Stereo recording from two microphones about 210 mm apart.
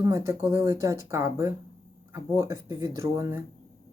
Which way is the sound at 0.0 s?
15° right (ahead or behind).